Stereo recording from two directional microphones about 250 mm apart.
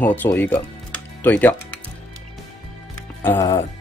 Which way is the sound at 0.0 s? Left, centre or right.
Centre.